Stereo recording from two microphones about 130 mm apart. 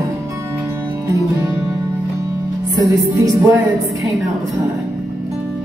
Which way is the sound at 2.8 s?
25° right (ahead or behind).